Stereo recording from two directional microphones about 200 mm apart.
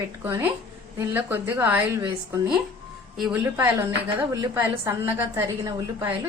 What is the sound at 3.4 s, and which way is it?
A woman's voice, 15° right (ahead or behind).